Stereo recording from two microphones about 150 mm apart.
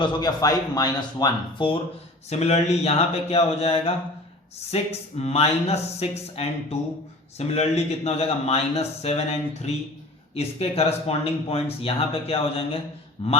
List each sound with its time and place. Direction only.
0.0 s speech: 25° left (ahead or behind)
2.3 s speech: 45° left (ahead or behind)